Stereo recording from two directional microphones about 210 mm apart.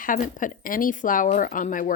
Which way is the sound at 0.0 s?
40° left (ahead or behind).